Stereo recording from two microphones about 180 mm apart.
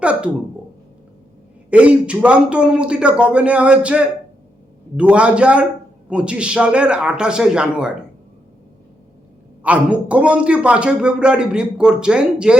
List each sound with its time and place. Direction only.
0.0 s speech: 5° right (ahead or behind)
1.7 s a man's voice: 5° right (ahead or behind)
9.6 s a man's voice: 5° right (ahead or behind)